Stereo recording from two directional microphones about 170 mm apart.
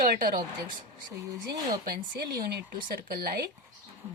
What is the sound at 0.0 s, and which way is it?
Speech, 55° right (ahead or behind).